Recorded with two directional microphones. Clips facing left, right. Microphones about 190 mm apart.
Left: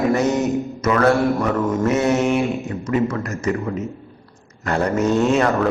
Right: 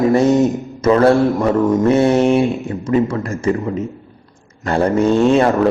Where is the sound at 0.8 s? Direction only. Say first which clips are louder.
Right 6 dB; 30° right (ahead or behind).